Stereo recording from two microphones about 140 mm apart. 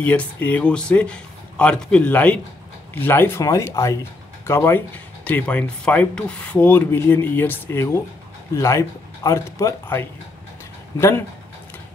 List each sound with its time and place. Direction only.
0.0 s speech: 10° left (ahead or behind)